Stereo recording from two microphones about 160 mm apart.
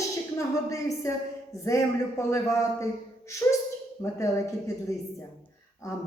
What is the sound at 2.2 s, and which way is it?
Speech, 20° left (ahead or behind).